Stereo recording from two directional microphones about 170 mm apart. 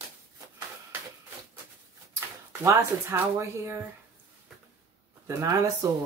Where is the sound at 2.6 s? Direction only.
15° right (ahead or behind).